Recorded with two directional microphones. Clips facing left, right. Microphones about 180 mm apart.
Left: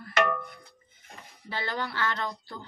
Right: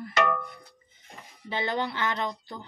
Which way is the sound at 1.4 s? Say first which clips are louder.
Right 4 dB; 20° right (ahead or behind).